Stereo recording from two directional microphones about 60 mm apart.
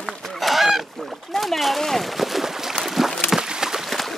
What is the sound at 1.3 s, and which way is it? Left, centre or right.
Speech, centre.